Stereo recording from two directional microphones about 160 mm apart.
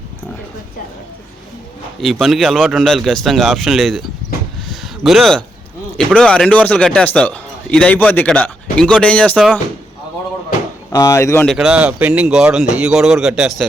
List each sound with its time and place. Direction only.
2.0 s speech: centre (ahead or behind)
4.7 s a sound: centre (ahead or behind)
6.0 s a man's voice: 5° left (ahead or behind)
10.9 s a man's voice: 20° left (ahead or behind)
11.4 s speech: 5° right (ahead or behind)